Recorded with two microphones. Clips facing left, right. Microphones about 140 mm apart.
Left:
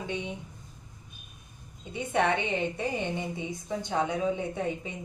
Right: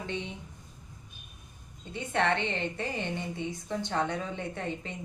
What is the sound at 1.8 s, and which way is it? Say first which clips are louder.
A woman's voice: left 2 dB; 10° left (ahead or behind).